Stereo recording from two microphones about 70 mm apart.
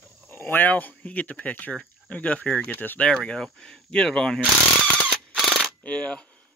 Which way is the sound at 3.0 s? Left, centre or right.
Centre.